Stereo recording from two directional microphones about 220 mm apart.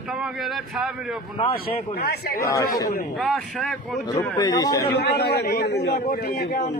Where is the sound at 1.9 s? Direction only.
45° left (ahead or behind).